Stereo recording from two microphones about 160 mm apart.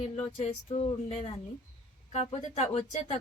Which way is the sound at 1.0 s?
40° left (ahead or behind).